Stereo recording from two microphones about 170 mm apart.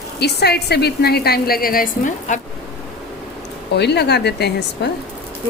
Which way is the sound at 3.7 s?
80° left.